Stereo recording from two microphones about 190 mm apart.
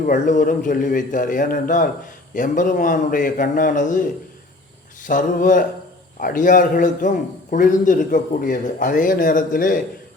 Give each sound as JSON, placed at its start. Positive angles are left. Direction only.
{"t": 0.0, "sound": "a man's voice", "side_deg": 45}